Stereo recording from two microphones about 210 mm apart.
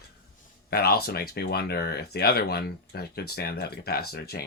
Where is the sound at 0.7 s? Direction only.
45° left (ahead or behind).